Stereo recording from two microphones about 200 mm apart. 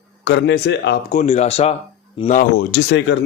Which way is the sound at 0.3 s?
60° left (ahead or behind).